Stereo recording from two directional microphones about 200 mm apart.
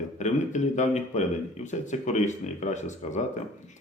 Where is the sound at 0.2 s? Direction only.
35° left (ahead or behind).